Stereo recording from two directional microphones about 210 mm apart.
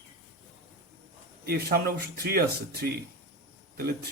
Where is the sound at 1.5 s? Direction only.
50° right (ahead or behind).